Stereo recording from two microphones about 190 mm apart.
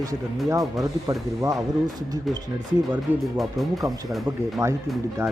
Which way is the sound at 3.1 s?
10° right (ahead or behind).